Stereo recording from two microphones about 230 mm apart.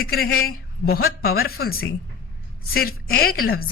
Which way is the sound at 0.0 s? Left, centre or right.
Left.